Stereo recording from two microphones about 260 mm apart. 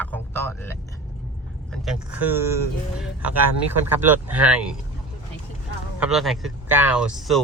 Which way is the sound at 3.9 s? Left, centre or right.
Centre.